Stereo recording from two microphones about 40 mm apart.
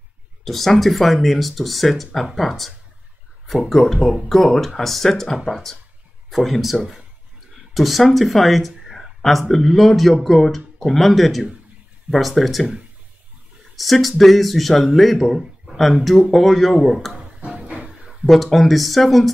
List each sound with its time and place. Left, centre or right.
0.5 s speech: centre
13.7 s speech: centre
17.5 s a sound: right
18.2 s speech: centre